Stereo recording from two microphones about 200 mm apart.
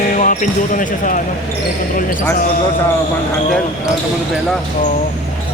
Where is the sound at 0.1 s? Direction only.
40° left (ahead or behind).